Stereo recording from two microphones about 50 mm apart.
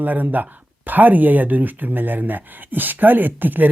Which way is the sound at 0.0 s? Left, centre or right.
Right.